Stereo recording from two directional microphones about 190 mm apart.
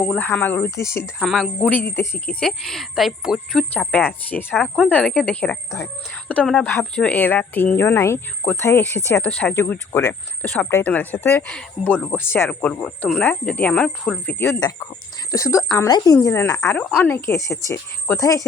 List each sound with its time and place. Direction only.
0.0 s speech: 5° left (ahead or behind)
1.0 s speech: centre (ahead or behind); by 18.4 s 15° left (ahead or behind)